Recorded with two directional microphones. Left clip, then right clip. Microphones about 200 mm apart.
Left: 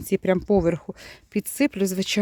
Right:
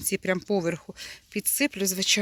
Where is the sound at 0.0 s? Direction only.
45° left (ahead or behind).